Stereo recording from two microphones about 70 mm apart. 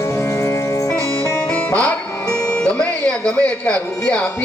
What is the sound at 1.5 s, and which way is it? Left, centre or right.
Music, centre.